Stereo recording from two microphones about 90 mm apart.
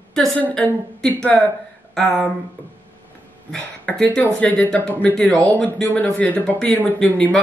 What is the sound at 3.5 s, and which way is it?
Speech, 5° left (ahead or behind).